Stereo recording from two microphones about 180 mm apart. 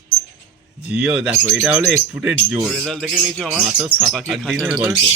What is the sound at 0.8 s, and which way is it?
Speech, 5° right (ahead or behind).